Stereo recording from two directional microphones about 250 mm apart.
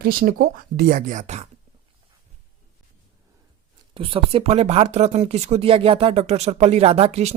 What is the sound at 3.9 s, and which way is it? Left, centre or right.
Speech, right.